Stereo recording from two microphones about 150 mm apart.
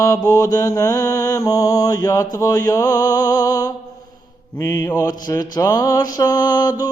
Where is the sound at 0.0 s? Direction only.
25° left (ahead or behind).